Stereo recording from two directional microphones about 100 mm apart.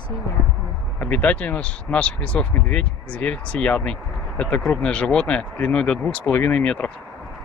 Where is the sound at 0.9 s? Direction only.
15° left (ahead or behind).